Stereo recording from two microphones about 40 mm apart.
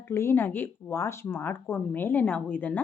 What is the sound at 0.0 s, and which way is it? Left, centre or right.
Speech, left.